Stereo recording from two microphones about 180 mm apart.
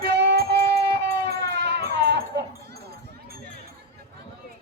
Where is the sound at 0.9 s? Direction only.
70° right (ahead or behind).